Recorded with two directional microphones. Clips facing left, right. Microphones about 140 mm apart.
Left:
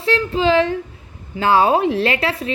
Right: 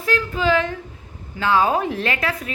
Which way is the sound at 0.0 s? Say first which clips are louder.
Left 4 dB; 30° left (ahead or behind).